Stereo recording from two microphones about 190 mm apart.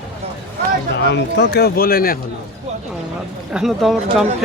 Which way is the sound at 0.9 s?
65° left (ahead or behind).